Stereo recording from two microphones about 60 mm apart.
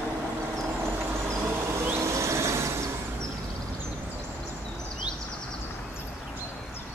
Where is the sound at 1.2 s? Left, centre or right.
Right.